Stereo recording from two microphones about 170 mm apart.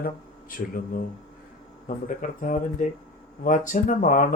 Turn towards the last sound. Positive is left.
turn(degrees=50)  # may be behind; listen again after turning